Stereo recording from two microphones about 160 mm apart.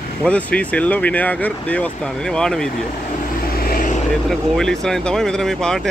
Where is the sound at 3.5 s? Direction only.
65° left (ahead or behind).